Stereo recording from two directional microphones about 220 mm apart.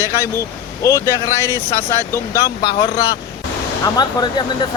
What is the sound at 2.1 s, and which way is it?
Speech, 15° left (ahead or behind).